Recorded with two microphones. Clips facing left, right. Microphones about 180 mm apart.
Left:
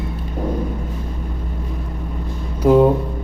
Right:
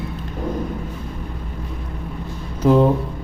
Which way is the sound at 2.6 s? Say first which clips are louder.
Left 2 dB; 10° left (ahead or behind).